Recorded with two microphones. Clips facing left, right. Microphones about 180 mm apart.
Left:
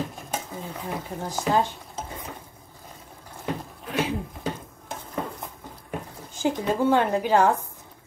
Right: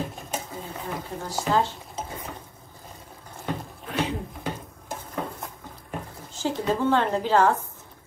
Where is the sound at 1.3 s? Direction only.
15° left (ahead or behind).